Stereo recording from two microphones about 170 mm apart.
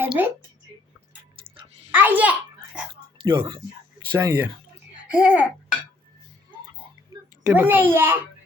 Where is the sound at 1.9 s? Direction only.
10° right (ahead or behind).